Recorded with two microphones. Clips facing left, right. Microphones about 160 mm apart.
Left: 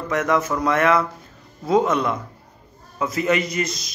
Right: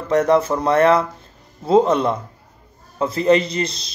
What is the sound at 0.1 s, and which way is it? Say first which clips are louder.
A man's voice: right 6 dB; 35° right (ahead or behind).